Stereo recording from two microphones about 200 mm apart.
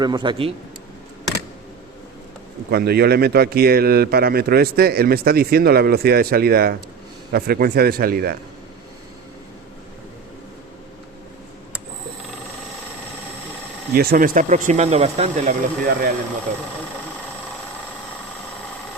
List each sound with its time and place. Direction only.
0.0 s a man's voice: 20° right (ahead or behind)
2.6 s a man's voice: 50° right (ahead or behind)
13.9 s speech: 50° right (ahead or behind)